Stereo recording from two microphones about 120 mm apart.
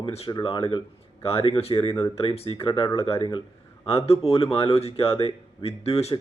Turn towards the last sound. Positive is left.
turn(degrees=60)  # may be behind; listen again after turning